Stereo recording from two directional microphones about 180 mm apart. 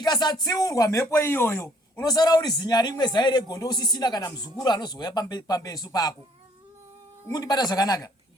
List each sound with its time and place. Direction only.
0.0 s speech: 25° left (ahead or behind)
7.3 s speech: 20° left (ahead or behind)